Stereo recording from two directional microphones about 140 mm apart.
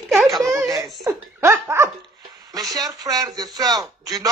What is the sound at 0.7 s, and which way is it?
Giggle, centre (ahead or behind).